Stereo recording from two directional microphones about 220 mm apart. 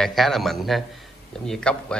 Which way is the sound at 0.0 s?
Centre (ahead or behind).